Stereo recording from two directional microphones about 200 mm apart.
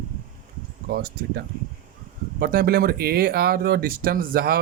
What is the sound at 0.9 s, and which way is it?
Speech, 50° right (ahead or behind).